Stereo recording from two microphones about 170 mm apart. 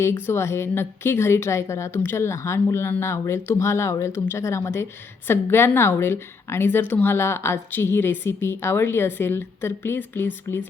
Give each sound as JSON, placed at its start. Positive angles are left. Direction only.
{"t": 0.0, "sound": "a woman's voice", "side_deg": 15}